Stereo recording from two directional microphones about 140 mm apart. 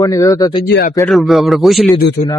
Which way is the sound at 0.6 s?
90° left.